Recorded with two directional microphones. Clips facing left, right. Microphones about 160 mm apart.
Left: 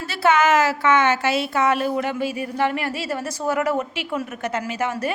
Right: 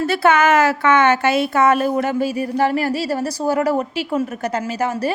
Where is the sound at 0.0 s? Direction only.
55° right (ahead or behind).